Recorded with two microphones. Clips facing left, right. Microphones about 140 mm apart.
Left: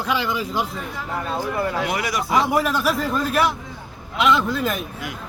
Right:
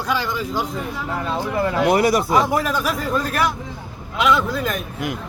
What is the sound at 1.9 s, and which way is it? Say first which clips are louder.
Speech: right 7 dB; 35° right (ahead or behind).